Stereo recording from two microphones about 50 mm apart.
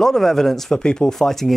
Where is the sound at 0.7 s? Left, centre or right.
Centre.